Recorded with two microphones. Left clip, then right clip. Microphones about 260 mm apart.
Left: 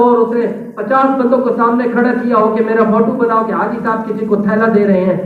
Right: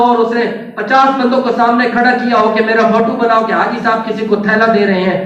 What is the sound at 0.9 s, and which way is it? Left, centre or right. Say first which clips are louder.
A man's voice: right 2 dB; right.